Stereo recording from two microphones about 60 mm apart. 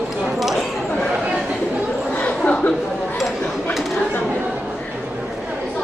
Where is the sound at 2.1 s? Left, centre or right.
Left.